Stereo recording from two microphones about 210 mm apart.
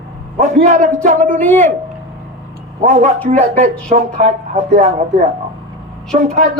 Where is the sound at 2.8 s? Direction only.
35° right (ahead or behind).